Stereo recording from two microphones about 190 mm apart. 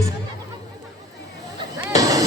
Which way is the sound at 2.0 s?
20° right (ahead or behind).